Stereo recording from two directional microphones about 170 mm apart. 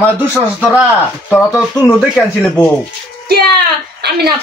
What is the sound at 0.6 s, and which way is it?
Speech, 10° right (ahead or behind).